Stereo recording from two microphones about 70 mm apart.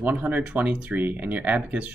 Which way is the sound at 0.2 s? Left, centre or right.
Right.